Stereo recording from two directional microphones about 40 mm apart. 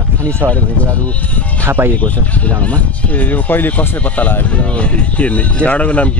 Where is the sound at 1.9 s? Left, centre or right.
Left.